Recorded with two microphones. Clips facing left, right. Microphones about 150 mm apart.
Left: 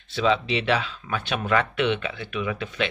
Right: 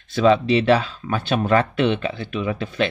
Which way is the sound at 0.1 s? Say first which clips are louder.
Right 7 dB; 45° right (ahead or behind).